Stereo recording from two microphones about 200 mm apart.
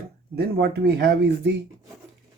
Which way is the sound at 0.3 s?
55° right (ahead or behind).